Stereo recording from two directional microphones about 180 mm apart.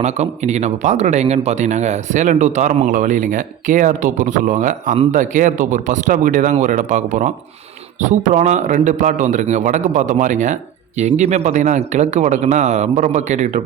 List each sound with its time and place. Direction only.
0.0 s speech: 40° right (ahead or behind)